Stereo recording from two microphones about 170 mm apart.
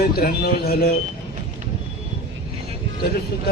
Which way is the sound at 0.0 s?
65° left (ahead or behind).